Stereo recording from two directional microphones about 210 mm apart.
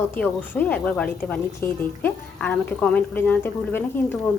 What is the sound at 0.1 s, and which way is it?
A woman's voice, 10° left (ahead or behind).